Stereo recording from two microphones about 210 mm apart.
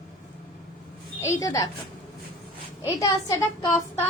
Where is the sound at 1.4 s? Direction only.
15° left (ahead or behind).